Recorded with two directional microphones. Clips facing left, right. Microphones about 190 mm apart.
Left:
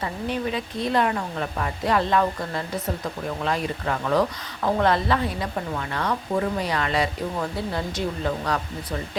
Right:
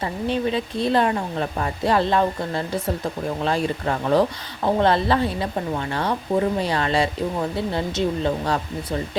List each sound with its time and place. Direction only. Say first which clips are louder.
0.0 s speech: right 4 dB; 30° right (ahead or behind)